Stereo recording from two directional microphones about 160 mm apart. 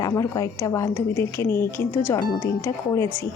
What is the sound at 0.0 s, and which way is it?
Speech, 20° left (ahead or behind).